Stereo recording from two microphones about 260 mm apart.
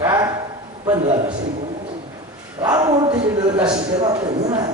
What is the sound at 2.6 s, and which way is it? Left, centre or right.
A man's voice, centre.